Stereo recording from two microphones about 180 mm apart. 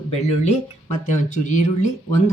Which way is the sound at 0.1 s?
40° left (ahead or behind).